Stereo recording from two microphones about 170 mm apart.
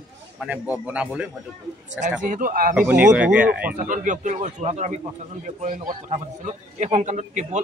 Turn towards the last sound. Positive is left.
turn(degrees=-45)  # may be behind; listen again after turning